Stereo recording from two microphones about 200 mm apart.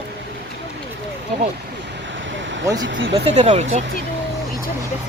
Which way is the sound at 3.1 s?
30° right (ahead or behind).